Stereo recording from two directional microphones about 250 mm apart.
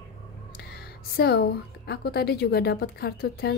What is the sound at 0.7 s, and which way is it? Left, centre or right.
A woman's voice, left.